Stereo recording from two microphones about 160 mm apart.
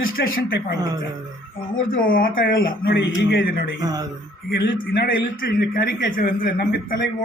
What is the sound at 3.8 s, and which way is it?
Speech, 25° right (ahead or behind).